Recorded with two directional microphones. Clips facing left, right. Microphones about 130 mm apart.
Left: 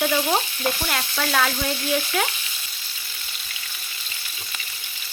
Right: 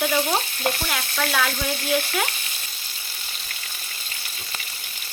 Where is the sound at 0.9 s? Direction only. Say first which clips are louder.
Left 1 dB; centre (ahead or behind).